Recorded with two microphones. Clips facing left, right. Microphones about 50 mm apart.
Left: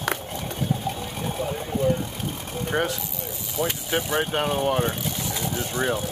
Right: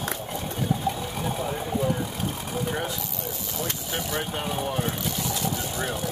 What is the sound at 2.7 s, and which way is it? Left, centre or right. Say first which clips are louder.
Speech: left 7 dB; left.